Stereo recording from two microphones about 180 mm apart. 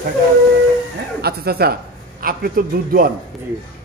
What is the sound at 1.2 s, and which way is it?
A man's voice, 60° right (ahead or behind).